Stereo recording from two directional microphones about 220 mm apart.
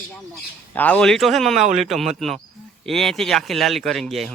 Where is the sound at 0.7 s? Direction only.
5° left (ahead or behind).